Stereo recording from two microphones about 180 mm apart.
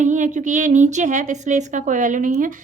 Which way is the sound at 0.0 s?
40° right (ahead or behind).